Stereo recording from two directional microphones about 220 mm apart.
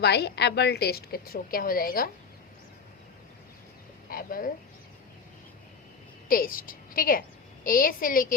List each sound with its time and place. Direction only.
0.0 s a woman's voice: 50° left (ahead or behind)
4.1 s speech: 40° left (ahead or behind)
6.2 s a woman's voice: 40° left (ahead or behind)